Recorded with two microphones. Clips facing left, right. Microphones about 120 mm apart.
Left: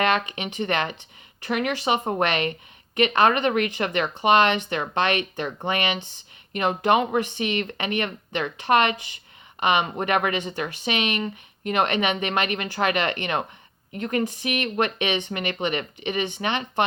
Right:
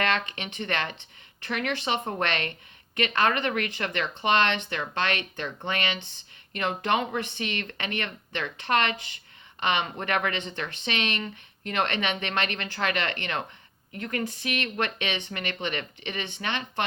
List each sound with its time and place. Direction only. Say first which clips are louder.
0.0 s speech: left 5 dB; 15° left (ahead or behind)